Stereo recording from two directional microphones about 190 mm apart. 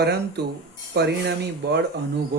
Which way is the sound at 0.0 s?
60° right (ahead or behind).